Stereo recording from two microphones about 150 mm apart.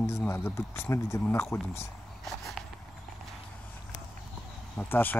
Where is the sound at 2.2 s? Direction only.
Centre (ahead or behind).